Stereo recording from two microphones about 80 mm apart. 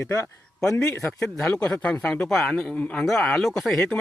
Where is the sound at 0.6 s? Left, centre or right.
Centre.